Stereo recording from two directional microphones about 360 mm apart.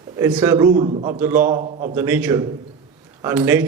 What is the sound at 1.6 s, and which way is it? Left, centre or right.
Speech, centre.